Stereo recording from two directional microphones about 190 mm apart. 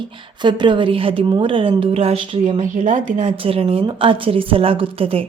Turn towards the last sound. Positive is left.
turn(degrees=-30)  # may be behind; listen again after turning